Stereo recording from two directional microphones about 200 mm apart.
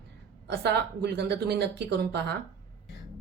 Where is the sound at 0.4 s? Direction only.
60° right (ahead or behind).